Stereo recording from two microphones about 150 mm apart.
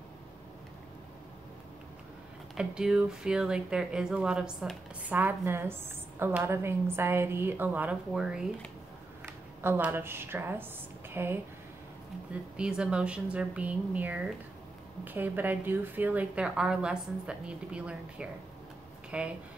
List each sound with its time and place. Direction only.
2.5 s speech: 5° right (ahead or behind)
9.2 s speech: 15° right (ahead or behind)
12.5 s speech: 5° right (ahead or behind)